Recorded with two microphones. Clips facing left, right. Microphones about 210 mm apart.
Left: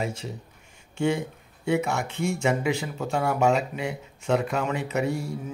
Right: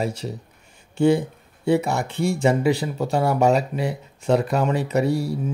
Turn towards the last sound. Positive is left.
turn(degrees=-35)  # may be behind; listen again after turning